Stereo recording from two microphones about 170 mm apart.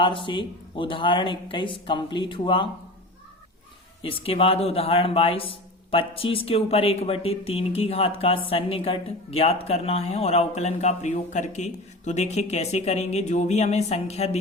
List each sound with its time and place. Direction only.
0.3 s speech: 30° left (ahead or behind)
4.0 s a woman's voice: 35° left (ahead or behind)